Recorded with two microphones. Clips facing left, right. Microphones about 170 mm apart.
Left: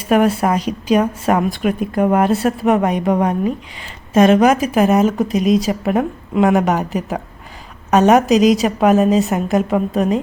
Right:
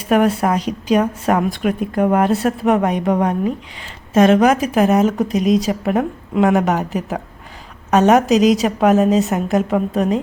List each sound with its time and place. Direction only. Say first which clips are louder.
0.1 s a woman's voice: left 1 dB; 5° left (ahead or behind)